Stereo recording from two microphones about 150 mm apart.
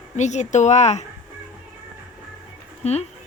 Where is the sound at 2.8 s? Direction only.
45° left (ahead or behind).